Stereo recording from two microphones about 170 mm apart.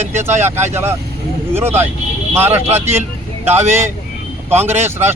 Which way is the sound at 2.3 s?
15° right (ahead or behind).